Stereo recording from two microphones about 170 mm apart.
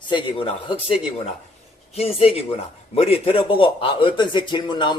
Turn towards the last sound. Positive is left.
turn(degrees=25)  # may be behind; listen again after turning